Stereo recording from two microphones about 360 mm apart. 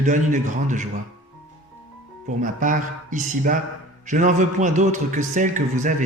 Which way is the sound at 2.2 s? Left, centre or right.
Right.